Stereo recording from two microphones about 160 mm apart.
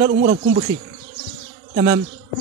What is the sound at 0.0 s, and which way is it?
Speech, 75° right (ahead or behind).